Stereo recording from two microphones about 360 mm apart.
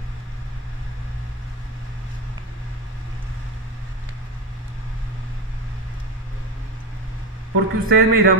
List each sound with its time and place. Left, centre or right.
7.5 s a man's voice: right